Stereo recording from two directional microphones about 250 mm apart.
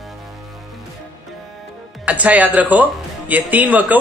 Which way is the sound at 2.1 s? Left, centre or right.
Centre.